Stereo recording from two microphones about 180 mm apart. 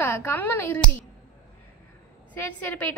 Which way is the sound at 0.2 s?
10° left (ahead or behind).